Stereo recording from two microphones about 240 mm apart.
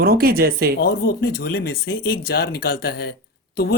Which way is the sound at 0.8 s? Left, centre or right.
Left.